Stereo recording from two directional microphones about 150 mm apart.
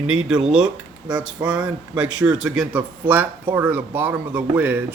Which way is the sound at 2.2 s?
5° right (ahead or behind).